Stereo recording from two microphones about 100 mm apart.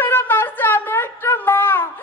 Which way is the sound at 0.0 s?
20° left (ahead or behind).